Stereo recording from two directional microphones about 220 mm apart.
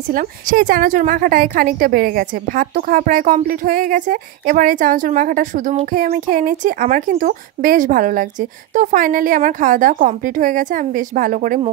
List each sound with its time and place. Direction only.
0.1 s a woman's voice: 40° right (ahead or behind)